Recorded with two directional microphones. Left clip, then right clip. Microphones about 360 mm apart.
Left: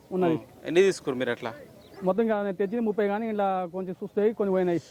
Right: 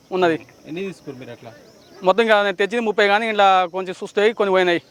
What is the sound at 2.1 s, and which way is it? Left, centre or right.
Speech, centre.